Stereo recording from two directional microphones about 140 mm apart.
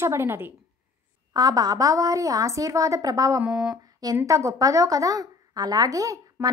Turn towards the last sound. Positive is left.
turn(degrees=-25)  # may be behind; listen again after turning